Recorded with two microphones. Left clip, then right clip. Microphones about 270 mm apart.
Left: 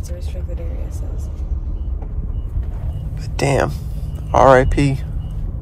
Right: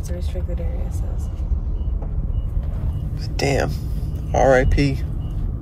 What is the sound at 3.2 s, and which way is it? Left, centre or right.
Speech, centre.